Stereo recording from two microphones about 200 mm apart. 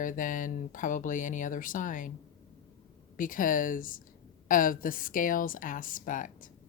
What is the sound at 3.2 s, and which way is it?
A woman's voice, 40° left (ahead or behind).